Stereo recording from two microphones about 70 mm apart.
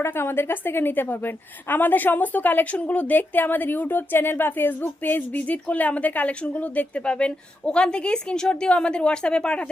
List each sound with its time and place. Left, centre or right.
0.0 s a woman's voice: left; by 9.6 s centre